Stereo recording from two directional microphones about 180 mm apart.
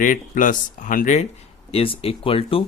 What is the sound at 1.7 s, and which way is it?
Speech, 30° left (ahead or behind).